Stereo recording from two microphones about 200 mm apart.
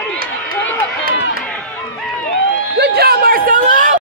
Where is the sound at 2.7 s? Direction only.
55° right (ahead or behind).